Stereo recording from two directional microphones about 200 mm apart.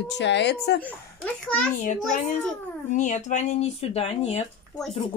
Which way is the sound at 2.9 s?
40° left (ahead or behind).